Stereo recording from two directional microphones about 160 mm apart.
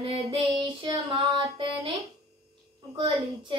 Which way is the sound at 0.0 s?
35° right (ahead or behind).